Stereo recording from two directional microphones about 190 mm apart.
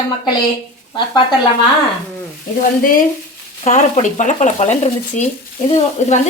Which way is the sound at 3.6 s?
40° left (ahead or behind).